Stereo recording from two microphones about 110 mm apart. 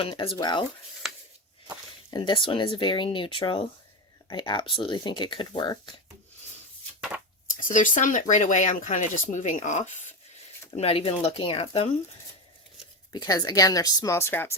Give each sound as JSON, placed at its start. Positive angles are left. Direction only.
{"t": 0.0, "sound": "speech", "side_deg": 55}
{"t": 1.0, "sound": "a sound", "side_deg": -5}
{"t": 2.0, "sound": "speech", "side_deg": 50}
{"t": 8.1, "sound": "speech", "side_deg": 90}
{"t": 10.8, "sound": "speech", "side_deg": 60}
{"t": 13.1, "sound": "speech", "side_deg": 35}